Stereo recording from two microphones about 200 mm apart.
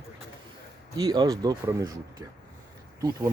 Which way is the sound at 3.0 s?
20° right (ahead or behind).